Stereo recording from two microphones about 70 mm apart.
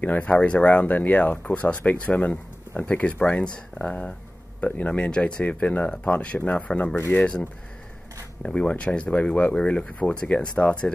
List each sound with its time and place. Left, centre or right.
0.0 s speech: left